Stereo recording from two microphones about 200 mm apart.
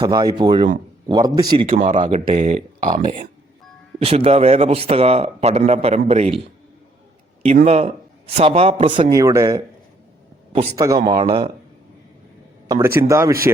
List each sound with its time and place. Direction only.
0.0 s a man's voice: 20° right (ahead or behind)
1.8 s a man's voice: 40° right (ahead or behind)
4.0 s a man's voice: 30° right (ahead or behind)
7.4 s a man's voice: 35° right (ahead or behind)
12.6 s speech: 15° right (ahead or behind)